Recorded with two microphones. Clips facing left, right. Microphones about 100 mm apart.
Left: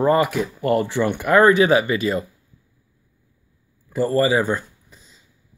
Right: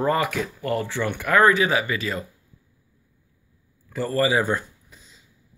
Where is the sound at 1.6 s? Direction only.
25° left (ahead or behind).